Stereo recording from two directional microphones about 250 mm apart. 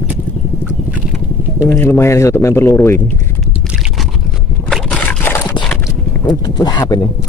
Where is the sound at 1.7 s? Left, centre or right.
Centre.